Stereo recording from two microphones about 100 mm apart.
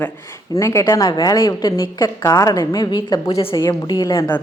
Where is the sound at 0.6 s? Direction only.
30° left (ahead or behind).